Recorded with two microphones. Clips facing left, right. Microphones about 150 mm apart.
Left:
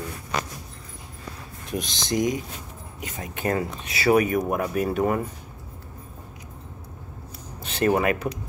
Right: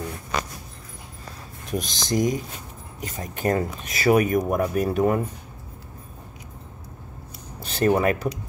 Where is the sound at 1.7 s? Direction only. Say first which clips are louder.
Right 1 dB; 40° right (ahead or behind).